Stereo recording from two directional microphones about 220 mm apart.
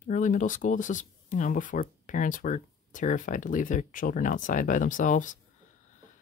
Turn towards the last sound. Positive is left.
turn(degrees=35)  # may be behind; listen again after turning